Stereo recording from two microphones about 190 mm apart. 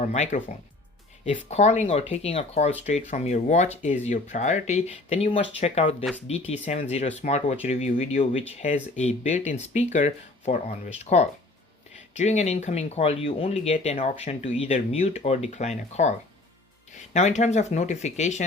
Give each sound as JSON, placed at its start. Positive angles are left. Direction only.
{"t": 0.0, "sound": "speech", "side_deg": 40}